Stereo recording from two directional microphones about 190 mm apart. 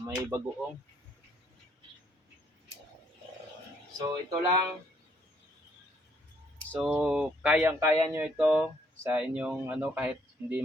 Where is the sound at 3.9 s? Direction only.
20° right (ahead or behind).